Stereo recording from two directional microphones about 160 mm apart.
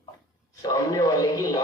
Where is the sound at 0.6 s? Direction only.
25° left (ahead or behind).